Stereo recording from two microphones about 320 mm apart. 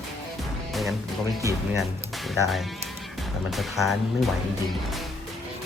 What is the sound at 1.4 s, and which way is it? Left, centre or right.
Speech, centre.